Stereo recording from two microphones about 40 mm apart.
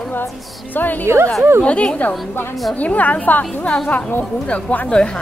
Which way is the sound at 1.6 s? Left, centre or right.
Left.